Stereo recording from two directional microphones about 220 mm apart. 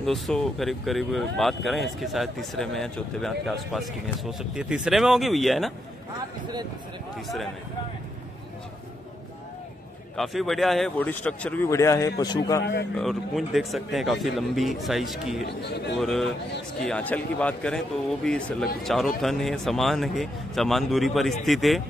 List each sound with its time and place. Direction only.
0.0 s speech: centre (ahead or behind)
10.1 s a man's voice: centre (ahead or behind); by 12.6 s 15° left (ahead or behind)
12.9 s speech: centre (ahead or behind)
15.4 s speech: 50° left (ahead or behind)
16.0 s speech: centre (ahead or behind)